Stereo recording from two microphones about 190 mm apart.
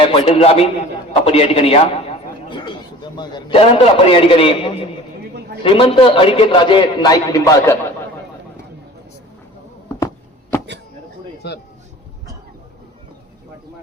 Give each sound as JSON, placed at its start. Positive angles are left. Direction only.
{"t": 0.0, "sound": "a man's voice", "side_deg": 30}
{"t": 11.4, "sound": "speech", "side_deg": 60}